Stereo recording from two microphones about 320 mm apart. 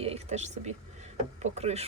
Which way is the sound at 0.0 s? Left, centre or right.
Centre.